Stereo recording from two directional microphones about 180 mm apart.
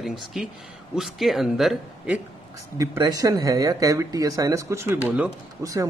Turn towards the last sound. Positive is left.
turn(degrees=-20)  # may be behind; listen again after turning